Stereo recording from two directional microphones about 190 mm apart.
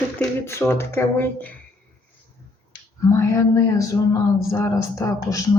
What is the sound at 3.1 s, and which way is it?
A woman's voice, 15° left (ahead or behind).